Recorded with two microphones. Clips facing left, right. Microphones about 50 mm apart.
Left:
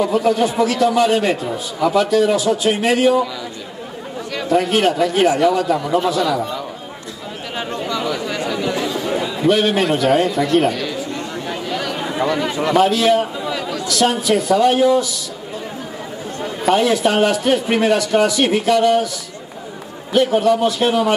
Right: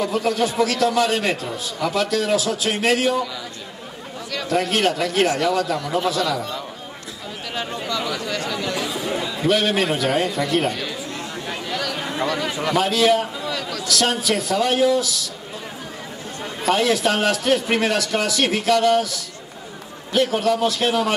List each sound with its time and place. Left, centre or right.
0.0 s a man's voice: centre
4.3 s chatter: centre
4.6 s a man's voice: centre
7.5 s a sound: centre
9.9 s speech: centre
11.8 s a sound: centre
12.6 s speech: centre
13.4 s a sound: centre
13.8 s a man's voice: centre
16.3 s a man's voice: centre
20.1 s a man's voice: centre